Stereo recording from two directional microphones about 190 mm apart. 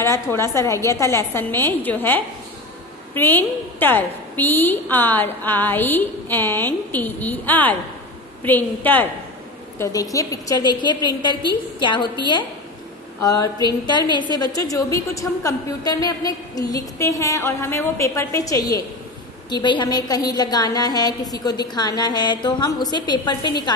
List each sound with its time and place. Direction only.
0.0 s a woman's voice: 15° left (ahead or behind)